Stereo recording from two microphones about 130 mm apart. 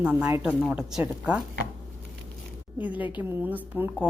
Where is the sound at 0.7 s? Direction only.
5° right (ahead or behind).